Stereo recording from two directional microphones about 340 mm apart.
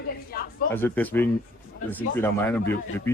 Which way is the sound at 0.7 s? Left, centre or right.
Centre.